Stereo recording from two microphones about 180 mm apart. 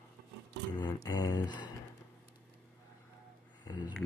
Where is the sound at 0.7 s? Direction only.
25° left (ahead or behind).